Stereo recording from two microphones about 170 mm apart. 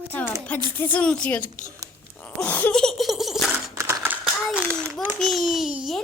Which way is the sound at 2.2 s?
10° left (ahead or behind).